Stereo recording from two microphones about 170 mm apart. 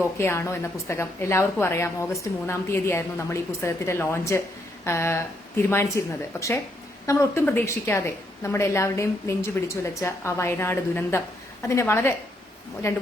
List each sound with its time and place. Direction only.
0.2 s a woman's voice: 15° left (ahead or behind)